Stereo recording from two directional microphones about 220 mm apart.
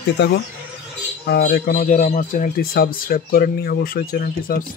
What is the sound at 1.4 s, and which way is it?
Speech, 35° left (ahead or behind).